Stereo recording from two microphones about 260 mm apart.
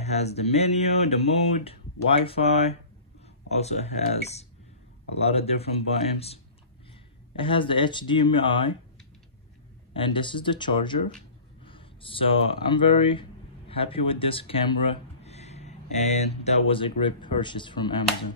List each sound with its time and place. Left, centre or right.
0.0 s speech: left
9.9 s speech: centre